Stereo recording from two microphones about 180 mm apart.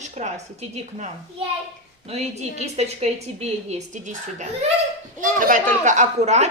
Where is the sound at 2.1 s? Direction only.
35° right (ahead or behind).